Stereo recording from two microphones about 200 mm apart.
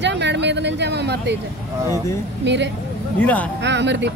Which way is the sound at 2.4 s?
60° right (ahead or behind).